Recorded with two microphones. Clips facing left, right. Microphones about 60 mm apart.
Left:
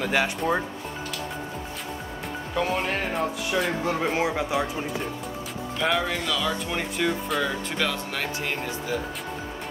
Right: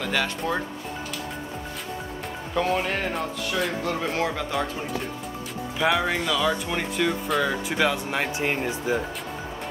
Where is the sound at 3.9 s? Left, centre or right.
Centre.